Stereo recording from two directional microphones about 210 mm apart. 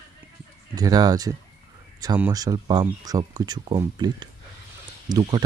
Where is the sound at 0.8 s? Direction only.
20° right (ahead or behind).